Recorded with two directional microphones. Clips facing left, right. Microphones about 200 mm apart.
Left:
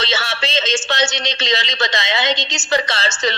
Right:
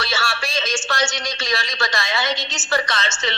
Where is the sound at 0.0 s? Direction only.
20° left (ahead or behind).